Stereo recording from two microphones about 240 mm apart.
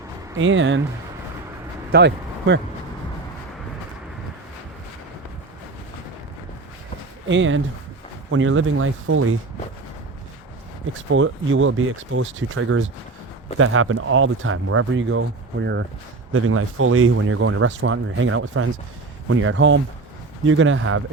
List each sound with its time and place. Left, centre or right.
0.3 s speech: right
1.9 s speech: right
7.3 s speech: right
11.1 s speech: right
16.3 s speech: right